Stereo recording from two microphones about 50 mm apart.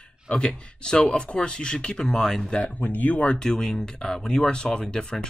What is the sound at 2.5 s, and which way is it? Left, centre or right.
Speech, left.